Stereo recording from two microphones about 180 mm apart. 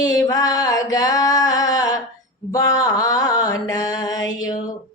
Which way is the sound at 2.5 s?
20° left (ahead or behind).